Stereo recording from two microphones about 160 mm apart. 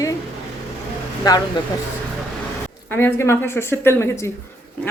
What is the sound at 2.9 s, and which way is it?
A woman's voice, 15° left (ahead or behind).